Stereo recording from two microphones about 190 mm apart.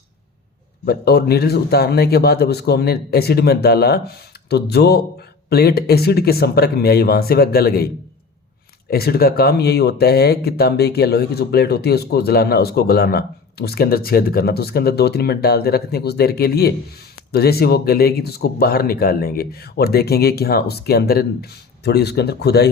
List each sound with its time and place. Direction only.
0.9 s speech: 55° left (ahead or behind)
8.9 s speech: 55° left (ahead or behind)